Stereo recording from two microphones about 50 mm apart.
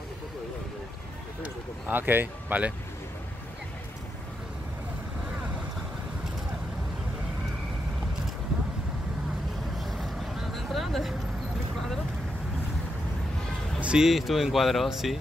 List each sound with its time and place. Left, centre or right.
1.4 s speech: right
9.8 s vehicle: centre
13.7 s music: right
14.0 s speech: centre